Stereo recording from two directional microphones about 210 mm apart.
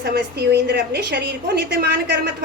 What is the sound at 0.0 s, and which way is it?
A woman's voice, 50° right (ahead or behind).